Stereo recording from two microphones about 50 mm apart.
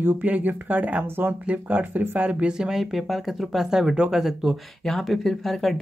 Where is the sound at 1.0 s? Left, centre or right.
Right.